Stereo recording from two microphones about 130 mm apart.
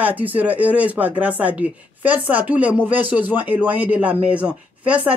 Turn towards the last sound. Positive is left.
turn(degrees=-10)  # may be behind; listen again after turning